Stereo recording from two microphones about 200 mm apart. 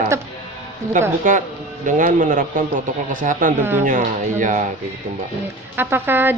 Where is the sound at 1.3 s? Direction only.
40° right (ahead or behind).